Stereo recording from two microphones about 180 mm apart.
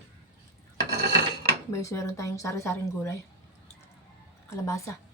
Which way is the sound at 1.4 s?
15° left (ahead or behind).